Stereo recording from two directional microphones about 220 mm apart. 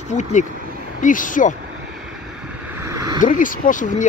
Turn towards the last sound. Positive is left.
turn(degrees=35)  # may be behind; listen again after turning